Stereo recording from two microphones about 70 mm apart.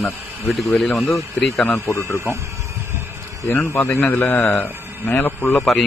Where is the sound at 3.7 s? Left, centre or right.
Left.